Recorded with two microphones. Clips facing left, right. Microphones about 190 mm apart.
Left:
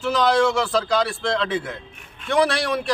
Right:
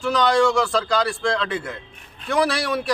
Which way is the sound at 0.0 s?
Centre (ahead or behind).